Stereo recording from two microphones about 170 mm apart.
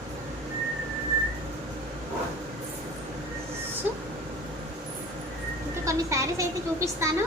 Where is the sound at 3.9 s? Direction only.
10° right (ahead or behind).